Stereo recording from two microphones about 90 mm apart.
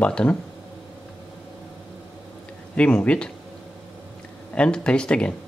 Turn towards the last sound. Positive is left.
turn(degrees=10)  # may be behind; listen again after turning